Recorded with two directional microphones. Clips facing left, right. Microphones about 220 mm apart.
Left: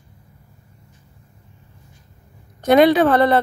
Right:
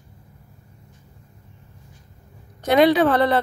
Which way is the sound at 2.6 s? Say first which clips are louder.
Left 3 dB; 50° left (ahead or behind).